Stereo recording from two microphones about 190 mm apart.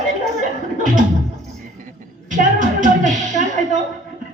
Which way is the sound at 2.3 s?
45° right (ahead or behind).